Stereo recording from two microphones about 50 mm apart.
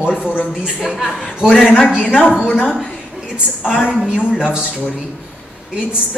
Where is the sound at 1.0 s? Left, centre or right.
Centre.